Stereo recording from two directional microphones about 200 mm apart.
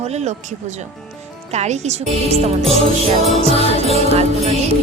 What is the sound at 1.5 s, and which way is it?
Speech, 35° right (ahead or behind).